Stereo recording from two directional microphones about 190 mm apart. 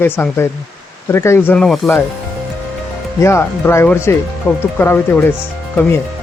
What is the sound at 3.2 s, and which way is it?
Speech, 15° left (ahead or behind).